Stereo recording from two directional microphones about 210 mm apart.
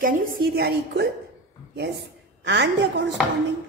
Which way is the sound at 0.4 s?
50° right (ahead or behind).